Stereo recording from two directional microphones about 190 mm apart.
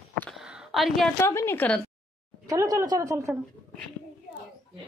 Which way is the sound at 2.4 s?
15° right (ahead or behind).